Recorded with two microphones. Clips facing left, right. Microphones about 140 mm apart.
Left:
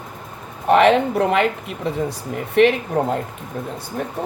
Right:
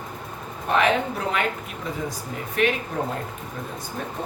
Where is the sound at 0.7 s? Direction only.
70° left (ahead or behind).